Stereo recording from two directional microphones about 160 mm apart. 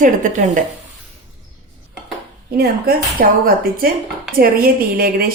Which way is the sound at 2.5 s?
70° right (ahead or behind).